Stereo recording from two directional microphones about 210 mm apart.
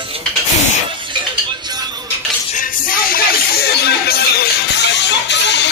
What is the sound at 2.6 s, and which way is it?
Music, 40° left (ahead or behind).